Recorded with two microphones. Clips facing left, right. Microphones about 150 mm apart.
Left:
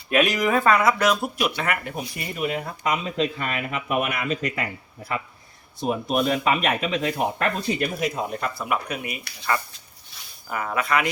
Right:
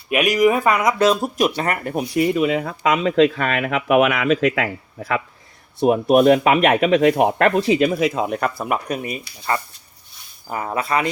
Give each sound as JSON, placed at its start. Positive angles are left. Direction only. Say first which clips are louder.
{"t": 0.1, "sound": "speech", "louder": "right 4 dB", "side_deg": -15}
{"t": 1.2, "sound": "speech", "louder": "right 6 dB", "side_deg": -40}
{"t": 2.8, "sound": "speech", "louder": "right 9 dB", "side_deg": -90}
{"t": 5.8, "sound": "speech", "louder": "right 10 dB", "side_deg": -60}
{"t": 10.5, "sound": "speech", "louder": "right 2 dB", "side_deg": -30}